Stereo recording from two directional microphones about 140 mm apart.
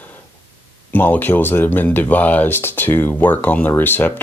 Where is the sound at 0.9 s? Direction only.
15° left (ahead or behind).